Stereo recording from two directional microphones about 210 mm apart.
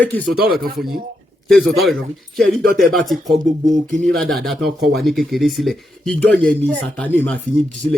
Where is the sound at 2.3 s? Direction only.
Centre (ahead or behind).